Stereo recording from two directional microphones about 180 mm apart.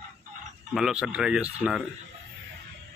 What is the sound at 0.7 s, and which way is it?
Speech, 5° right (ahead or behind).